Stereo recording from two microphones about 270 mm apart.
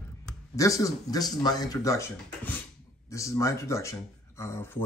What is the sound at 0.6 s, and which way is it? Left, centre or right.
Speech, centre.